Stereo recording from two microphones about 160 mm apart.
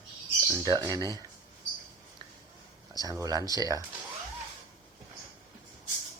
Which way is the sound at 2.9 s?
25° right (ahead or behind).